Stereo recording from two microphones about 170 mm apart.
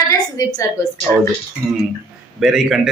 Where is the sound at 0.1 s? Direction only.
20° left (ahead or behind).